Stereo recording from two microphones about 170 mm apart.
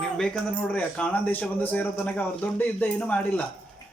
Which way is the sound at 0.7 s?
10° left (ahead or behind).